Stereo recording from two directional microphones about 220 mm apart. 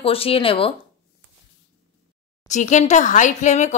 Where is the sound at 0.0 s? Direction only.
25° left (ahead or behind).